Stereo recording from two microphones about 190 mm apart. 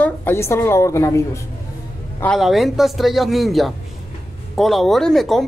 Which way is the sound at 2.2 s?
Centre (ahead or behind).